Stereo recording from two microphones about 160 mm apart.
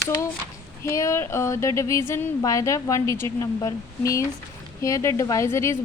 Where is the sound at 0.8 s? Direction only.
20° left (ahead or behind).